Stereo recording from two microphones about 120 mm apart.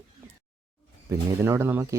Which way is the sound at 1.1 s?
20° right (ahead or behind).